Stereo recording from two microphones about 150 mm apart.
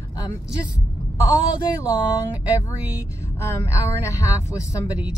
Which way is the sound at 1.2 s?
25° left (ahead or behind).